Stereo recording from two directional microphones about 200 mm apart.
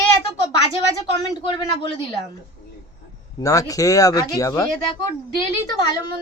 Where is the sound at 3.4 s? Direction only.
15° left (ahead or behind).